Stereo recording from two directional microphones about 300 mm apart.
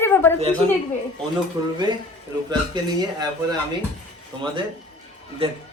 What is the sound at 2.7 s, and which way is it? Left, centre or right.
Speech, centre.